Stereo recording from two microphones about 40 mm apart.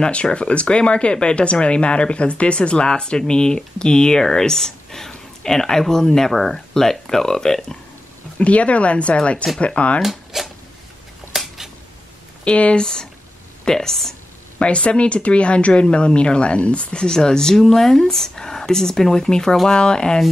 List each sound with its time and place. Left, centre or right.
0.0 s speech: left
8.4 s speech: left
10.0 s speech: centre
11.3 s a sound: centre
12.4 s speech: left
12.8 s speech: centre
14.6 s speech: left